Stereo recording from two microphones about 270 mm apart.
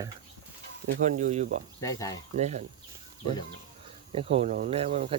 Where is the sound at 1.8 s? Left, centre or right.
Centre.